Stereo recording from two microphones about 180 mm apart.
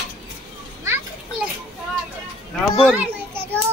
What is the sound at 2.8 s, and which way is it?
Speech, centre (ahead or behind).